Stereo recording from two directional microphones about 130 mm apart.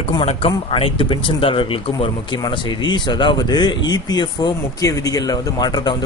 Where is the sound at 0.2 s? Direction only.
50° left (ahead or behind).